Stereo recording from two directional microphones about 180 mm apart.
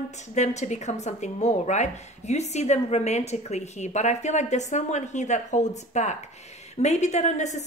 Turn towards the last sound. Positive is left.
turn(degrees=40)  # may be behind; listen again after turning